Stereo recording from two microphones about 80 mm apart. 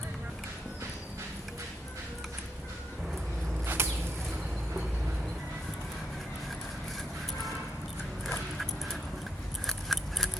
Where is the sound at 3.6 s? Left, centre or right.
Right.